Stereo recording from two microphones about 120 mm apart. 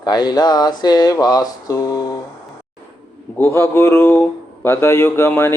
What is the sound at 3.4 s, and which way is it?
Speech, 20° left (ahead or behind).